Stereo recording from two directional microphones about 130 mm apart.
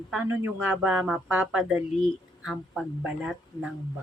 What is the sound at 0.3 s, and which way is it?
Speech, 15° right (ahead or behind).